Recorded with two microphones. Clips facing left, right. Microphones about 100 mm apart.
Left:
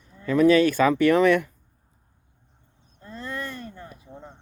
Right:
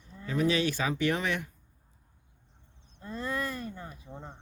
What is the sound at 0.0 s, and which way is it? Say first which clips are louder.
Speech: left 10 dB; 55° left (ahead or behind).